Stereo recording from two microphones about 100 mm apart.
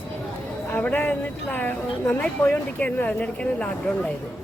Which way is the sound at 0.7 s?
20° left (ahead or behind).